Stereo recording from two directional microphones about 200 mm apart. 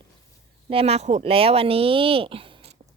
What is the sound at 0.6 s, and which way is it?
Speech, 30° right (ahead or behind).